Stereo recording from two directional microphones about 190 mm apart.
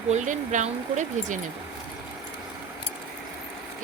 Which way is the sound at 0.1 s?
40° right (ahead or behind).